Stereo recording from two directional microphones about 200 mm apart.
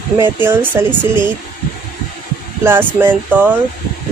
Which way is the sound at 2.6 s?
10° right (ahead or behind).